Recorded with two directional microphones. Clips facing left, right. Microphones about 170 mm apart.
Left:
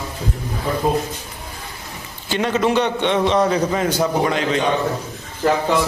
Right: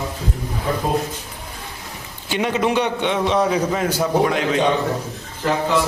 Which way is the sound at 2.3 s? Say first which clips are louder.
Left 1 dB; 10° right (ahead or behind).